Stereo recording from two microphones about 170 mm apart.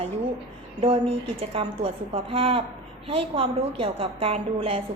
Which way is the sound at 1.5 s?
35° right (ahead or behind).